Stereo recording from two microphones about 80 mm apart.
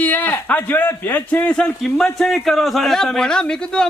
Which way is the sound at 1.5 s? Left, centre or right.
Centre.